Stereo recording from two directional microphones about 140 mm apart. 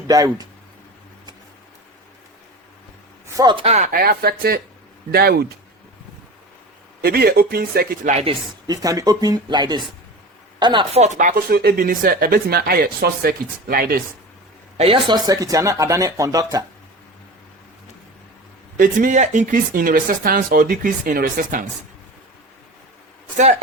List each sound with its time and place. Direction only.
0.1 s speech: 25° right (ahead or behind)
3.3 s speech: 35° right (ahead or behind)
3.9 s speech: 90° right
7.0 s speech: 90° right
8.1 s speech: 45° right (ahead or behind)
8.6 s speech: 25° right (ahead or behind)
10.9 s speech: 55° right (ahead or behind); by 14.0 s 90° right
14.8 s speech: 40° right (ahead or behind); by 16.6 s 25° right (ahead or behind)
18.8 s speech: 70° right (ahead or behind)